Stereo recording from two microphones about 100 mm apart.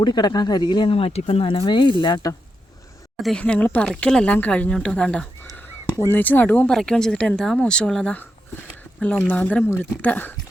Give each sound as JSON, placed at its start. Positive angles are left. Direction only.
{"t": 0.0, "sound": "speech", "side_deg": 50}
{"t": 0.7, "sound": "speech", "side_deg": 55}
{"t": 3.3, "sound": "speech", "side_deg": 10}
{"t": 6.7, "sound": "speech", "side_deg": 5}